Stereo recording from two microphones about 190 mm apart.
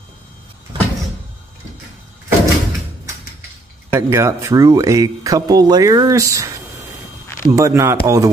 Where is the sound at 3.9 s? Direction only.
15° right (ahead or behind).